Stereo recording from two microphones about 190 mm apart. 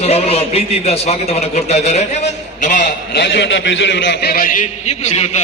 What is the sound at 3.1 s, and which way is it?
A man's voice, 65° left (ahead or behind).